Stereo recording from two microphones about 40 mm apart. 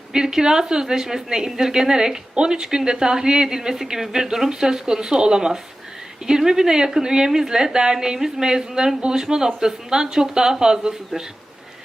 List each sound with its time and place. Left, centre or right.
0.1 s a woman's voice: centre